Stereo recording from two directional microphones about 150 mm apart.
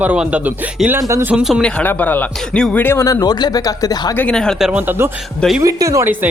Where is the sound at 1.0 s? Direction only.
20° right (ahead or behind).